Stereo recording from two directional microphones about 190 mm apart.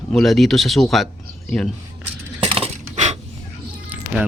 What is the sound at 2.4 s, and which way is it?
Coin, 30° right (ahead or behind).